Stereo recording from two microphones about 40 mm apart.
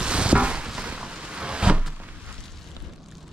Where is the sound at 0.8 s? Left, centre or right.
Right.